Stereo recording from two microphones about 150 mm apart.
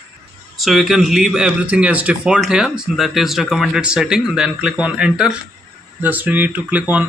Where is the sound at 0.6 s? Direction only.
Centre (ahead or behind).